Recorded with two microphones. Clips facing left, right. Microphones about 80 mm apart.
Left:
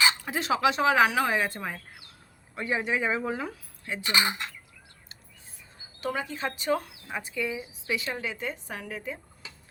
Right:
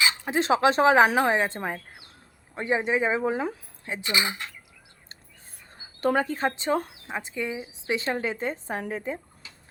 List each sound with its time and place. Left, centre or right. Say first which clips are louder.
0.2 s speech: right 4 dB; right
6.0 s a woman's voice: right 7 dB; right